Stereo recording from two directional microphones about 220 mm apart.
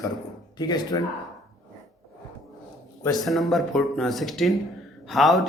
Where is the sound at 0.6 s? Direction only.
20° left (ahead or behind).